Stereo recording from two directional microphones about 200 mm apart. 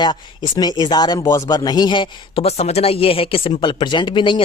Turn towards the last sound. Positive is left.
turn(degrees=25)  # may be behind; listen again after turning